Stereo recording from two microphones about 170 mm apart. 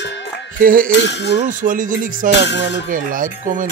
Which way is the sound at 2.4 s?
90° left.